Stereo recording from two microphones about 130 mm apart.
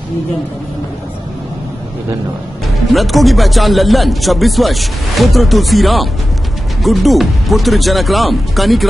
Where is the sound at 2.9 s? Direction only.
Centre (ahead or behind).